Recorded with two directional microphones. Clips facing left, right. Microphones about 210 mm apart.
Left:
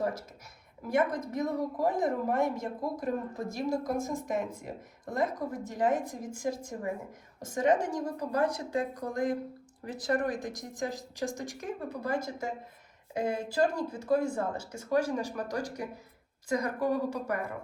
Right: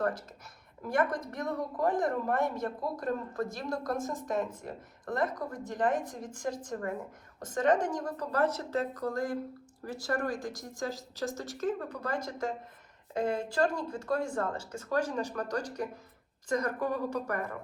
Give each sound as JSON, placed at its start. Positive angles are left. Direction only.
{"t": 0.9, "sound": "a woman's voice", "side_deg": 10}